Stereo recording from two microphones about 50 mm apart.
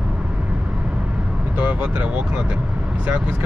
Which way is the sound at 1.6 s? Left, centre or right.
Right.